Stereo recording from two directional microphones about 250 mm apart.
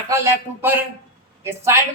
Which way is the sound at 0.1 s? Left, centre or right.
Centre.